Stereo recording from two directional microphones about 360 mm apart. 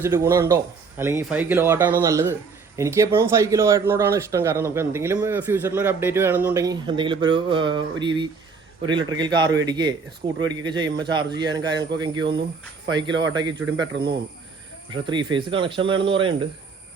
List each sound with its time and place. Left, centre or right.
0.0 s speech: centre
13.9 s speech: right
15.0 s speech: centre